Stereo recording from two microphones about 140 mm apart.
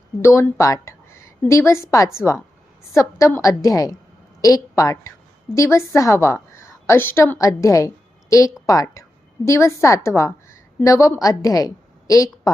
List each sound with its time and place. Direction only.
0.2 s a woman's voice: 20° left (ahead or behind)